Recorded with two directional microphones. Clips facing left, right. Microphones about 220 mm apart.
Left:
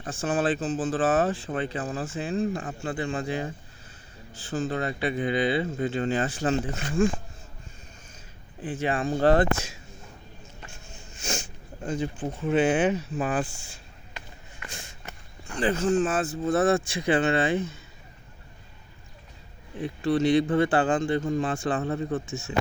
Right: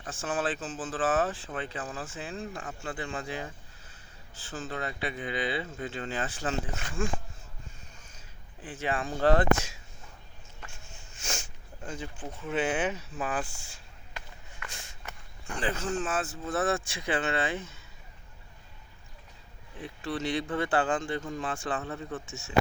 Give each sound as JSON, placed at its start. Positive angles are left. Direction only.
{"t": 0.0, "sound": "speech", "side_deg": 35}
{"t": 4.5, "sound": "speech", "side_deg": 35}
{"t": 8.6, "sound": "speech", "side_deg": 35}
{"t": 11.2, "sound": "a sound", "side_deg": 30}
{"t": 11.9, "sound": "speech", "side_deg": 35}
{"t": 15.6, "sound": "speech", "side_deg": 40}
{"t": 20.5, "sound": "speech", "side_deg": 30}